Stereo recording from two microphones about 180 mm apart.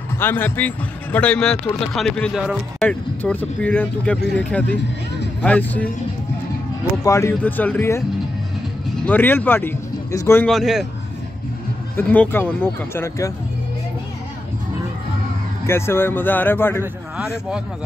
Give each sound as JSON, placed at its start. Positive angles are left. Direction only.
{"t": 0.2, "sound": "a man's voice", "side_deg": 10}
{"t": 7.0, "sound": "speech", "side_deg": 15}
{"t": 9.0, "sound": "speech", "side_deg": 10}
{"t": 10.4, "sound": "a man's voice", "side_deg": 0}
{"t": 12.0, "sound": "speech", "side_deg": 10}
{"t": 15.6, "sound": "speech", "side_deg": 15}